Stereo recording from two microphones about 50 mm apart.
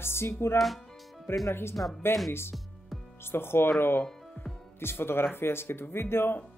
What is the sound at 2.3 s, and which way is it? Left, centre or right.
Speech, left.